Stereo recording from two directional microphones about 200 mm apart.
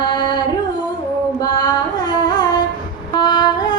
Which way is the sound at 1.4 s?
20° left (ahead or behind).